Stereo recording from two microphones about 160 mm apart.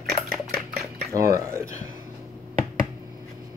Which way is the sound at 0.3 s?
Centre (ahead or behind).